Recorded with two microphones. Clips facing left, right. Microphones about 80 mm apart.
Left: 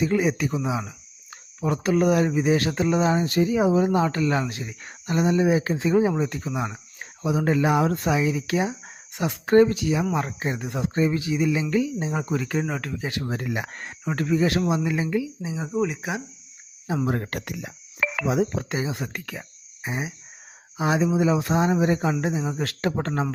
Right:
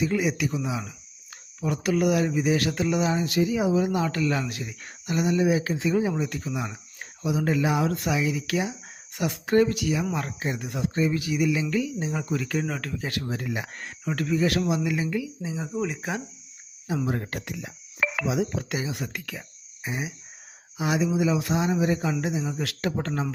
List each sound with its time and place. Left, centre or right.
0.0 s speech: left
7.9 s speech: left
12.6 s speech: centre
13.2 s speech: left
13.5 s speech: left
13.7 s speech: left
15.4 s speech: centre
15.8 s speech: centre
16.8 s speech: left
17.1 s speech: left
18.3 s speech: left
18.7 s speech: left